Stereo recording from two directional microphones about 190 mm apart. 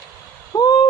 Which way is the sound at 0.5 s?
20° left (ahead or behind).